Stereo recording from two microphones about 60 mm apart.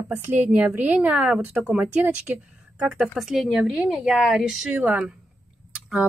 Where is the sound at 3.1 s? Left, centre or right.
Centre.